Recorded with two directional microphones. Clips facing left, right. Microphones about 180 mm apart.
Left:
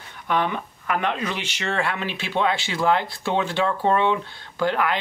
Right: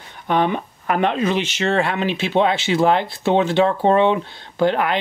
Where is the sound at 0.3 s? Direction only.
25° right (ahead or behind).